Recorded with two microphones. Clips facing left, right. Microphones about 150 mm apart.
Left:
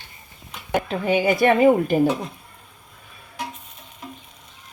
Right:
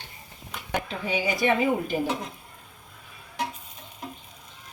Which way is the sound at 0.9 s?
55° left (ahead or behind).